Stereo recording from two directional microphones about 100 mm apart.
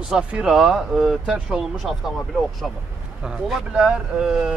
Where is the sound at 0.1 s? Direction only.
10° right (ahead or behind).